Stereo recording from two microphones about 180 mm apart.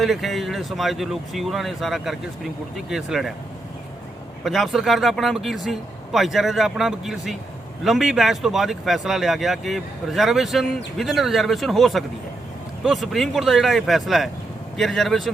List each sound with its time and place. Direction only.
0.0 s speech: centre (ahead or behind)
4.4 s speech: centre (ahead or behind)